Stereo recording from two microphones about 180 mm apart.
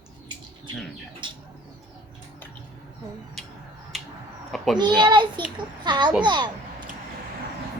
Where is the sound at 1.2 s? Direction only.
25° right (ahead or behind).